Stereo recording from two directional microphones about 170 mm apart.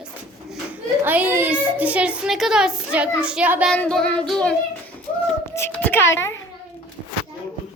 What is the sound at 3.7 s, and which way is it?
A child's voice, 5° left (ahead or behind).